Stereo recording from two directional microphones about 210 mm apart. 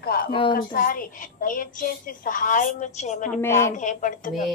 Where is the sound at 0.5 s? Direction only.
45° left (ahead or behind).